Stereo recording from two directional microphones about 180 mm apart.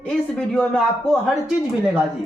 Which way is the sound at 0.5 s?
Centre (ahead or behind).